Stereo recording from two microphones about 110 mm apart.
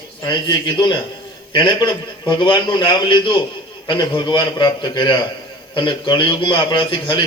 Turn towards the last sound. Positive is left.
turn(degrees=50)  # may be behind; listen again after turning